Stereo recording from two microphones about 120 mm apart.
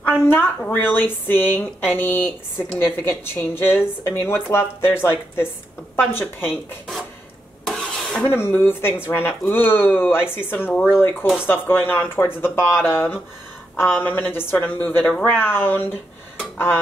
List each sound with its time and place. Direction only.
0.3 s a woman's voice: 15° left (ahead or behind)
7.6 s a sound: 5° left (ahead or behind)
8.3 s a woman's voice: 20° left (ahead or behind)